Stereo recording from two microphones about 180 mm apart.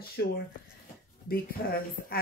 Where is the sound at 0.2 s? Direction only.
70° left (ahead or behind).